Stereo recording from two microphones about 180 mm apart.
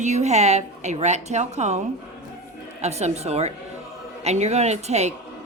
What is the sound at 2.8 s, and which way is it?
A woman's voice, 35° right (ahead or behind).